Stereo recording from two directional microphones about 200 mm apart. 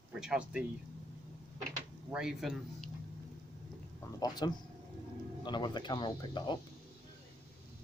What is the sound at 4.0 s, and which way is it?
Speech, 20° left (ahead or behind).